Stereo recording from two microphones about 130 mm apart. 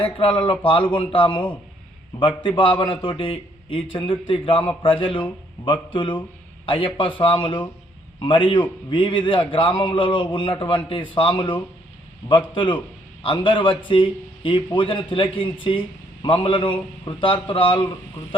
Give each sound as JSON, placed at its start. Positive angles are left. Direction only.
{"t": 0.0, "sound": "a man's voice", "side_deg": 40}
{"t": 12.5, "sound": "a man's voice", "side_deg": 35}